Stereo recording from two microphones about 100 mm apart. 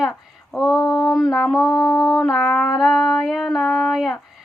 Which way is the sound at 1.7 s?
35° left (ahead or behind).